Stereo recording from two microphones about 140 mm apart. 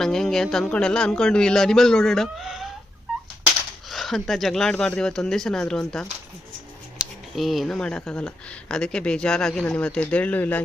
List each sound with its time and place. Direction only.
0.0 s speech: 5° left (ahead or behind)
3.8 s speech: centre (ahead or behind)